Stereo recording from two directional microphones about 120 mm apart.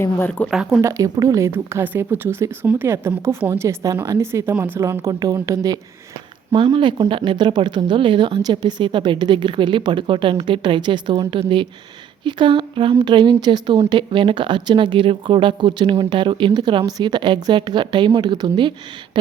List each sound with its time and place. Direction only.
0.0 s speech: 15° left (ahead or behind)
0.5 s speech: 5° right (ahead or behind)
0.8 s speech: 25° right (ahead or behind)
7.1 s speech: 45° right (ahead or behind)